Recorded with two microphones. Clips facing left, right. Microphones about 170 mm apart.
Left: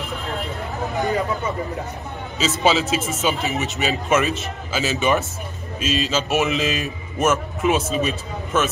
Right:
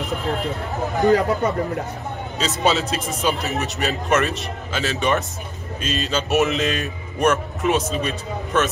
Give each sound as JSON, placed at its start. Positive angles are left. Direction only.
{"t": 1.0, "sound": "speech", "side_deg": -70}
{"t": 2.3, "sound": "speech", "side_deg": 0}